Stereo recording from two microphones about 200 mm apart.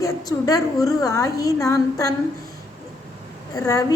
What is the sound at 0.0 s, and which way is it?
A woman's voice, 15° left (ahead or behind).